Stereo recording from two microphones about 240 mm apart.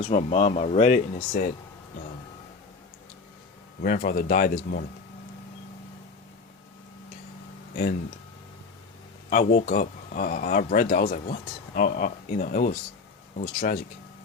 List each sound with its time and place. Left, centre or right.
0.0 s speech: left
3.8 s speech: left
9.3 s speech: left